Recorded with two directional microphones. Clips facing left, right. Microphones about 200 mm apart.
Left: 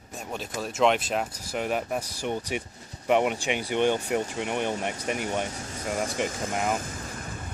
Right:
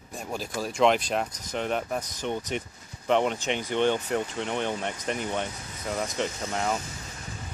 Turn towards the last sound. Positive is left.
turn(degrees=55)  # may be behind; listen again after turning